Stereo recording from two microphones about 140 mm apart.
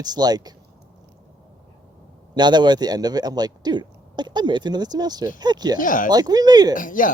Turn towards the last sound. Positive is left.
turn(degrees=75)  # may be behind; listen again after turning